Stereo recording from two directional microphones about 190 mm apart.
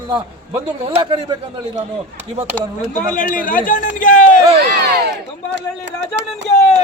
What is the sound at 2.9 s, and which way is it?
Speech, 40° left (ahead or behind).